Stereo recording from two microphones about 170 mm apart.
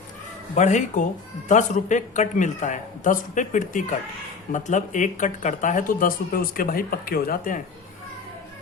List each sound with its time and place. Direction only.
0.5 s speech: 45° left (ahead or behind)